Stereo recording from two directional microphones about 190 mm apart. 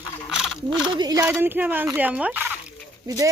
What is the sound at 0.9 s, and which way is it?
Speech, 20° right (ahead or behind).